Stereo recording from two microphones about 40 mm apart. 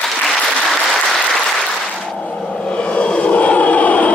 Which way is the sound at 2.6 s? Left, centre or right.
Left.